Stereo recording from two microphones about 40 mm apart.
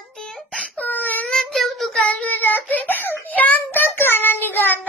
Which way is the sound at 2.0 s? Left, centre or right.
Left.